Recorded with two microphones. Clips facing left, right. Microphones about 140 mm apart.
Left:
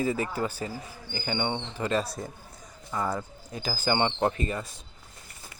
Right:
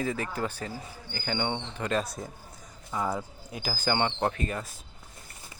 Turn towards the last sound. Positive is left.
turn(degrees=0)  # may be behind; listen again after turning